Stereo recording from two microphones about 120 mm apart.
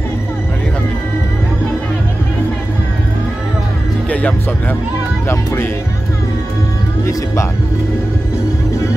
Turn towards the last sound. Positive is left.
turn(degrees=25)  # may be behind; listen again after turning